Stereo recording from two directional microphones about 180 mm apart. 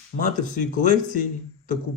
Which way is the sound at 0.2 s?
45° left (ahead or behind).